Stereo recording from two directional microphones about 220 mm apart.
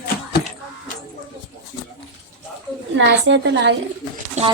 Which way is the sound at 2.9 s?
55° right (ahead or behind).